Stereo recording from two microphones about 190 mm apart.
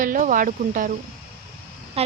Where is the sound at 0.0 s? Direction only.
45° right (ahead or behind).